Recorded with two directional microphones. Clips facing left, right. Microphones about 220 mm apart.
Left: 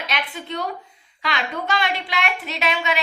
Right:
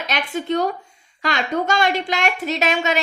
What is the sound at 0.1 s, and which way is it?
A woman's voice, 45° right (ahead or behind).